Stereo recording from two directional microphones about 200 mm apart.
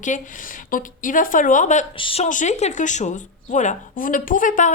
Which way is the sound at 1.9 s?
25° left (ahead or behind).